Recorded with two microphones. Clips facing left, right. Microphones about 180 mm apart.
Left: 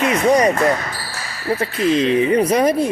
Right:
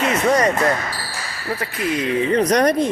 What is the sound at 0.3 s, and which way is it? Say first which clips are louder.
Speech: left 3 dB; 10° left (ahead or behind).